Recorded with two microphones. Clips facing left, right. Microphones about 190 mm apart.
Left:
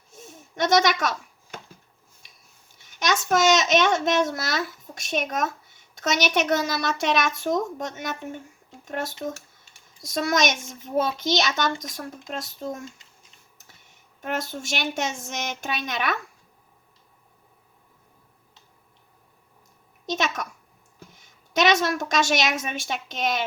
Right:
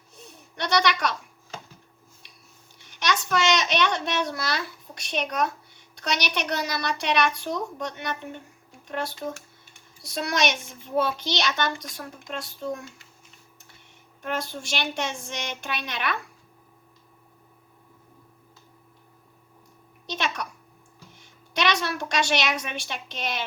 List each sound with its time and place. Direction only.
0.3 s a sound: 45° left (ahead or behind)
2.7 s a child's voice: 45° left (ahead or behind)
10.2 s a child's voice: 45° left (ahead or behind)
14.2 s a child's voice: 45° left (ahead or behind)
20.1 s a child's voice: 45° left (ahead or behind)